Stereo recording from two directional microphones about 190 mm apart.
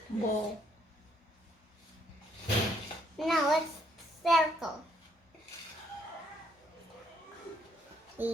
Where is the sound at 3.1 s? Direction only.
Centre (ahead or behind).